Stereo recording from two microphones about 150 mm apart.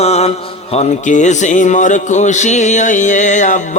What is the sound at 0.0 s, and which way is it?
Music, 45° left (ahead or behind).